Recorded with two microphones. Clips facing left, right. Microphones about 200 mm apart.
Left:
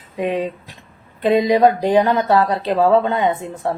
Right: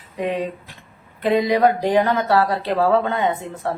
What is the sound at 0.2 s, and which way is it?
Speech, 20° left (ahead or behind).